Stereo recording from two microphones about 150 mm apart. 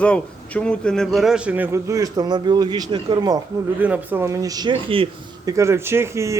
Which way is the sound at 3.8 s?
10° right (ahead or behind).